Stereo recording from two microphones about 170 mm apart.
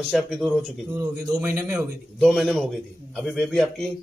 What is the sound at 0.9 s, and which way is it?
Speech, 20° right (ahead or behind).